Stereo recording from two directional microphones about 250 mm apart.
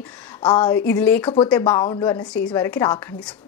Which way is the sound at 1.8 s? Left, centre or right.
Centre.